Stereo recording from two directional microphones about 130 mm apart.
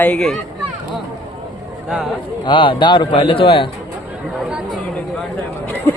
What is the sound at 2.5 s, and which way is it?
A man's voice, 40° left (ahead or behind).